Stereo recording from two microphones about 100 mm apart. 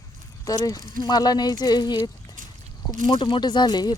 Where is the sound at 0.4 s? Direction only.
40° left (ahead or behind).